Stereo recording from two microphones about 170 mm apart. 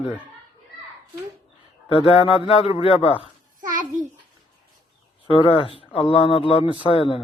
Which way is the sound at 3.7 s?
50° right (ahead or behind).